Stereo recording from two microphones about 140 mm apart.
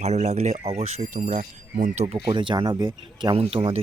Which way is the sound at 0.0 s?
55° right (ahead or behind).